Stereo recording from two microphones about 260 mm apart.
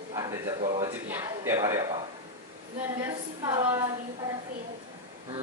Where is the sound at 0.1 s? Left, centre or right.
Centre.